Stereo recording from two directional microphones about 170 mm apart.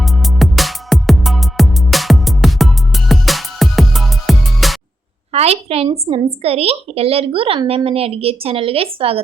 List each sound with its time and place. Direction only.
0.0 s music: centre (ahead or behind)
5.3 s a woman's voice: 35° right (ahead or behind)